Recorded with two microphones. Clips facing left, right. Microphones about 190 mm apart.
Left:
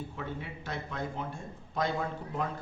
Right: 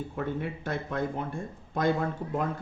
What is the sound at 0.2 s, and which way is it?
Speech, 55° right (ahead or behind).